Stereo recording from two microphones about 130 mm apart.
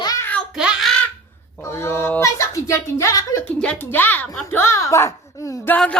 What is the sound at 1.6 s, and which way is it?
A child's voice, 20° left (ahead or behind).